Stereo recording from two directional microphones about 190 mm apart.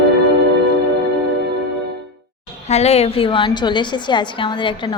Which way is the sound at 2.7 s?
35° left (ahead or behind).